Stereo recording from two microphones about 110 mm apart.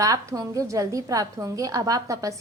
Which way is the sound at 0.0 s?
30° right (ahead or behind).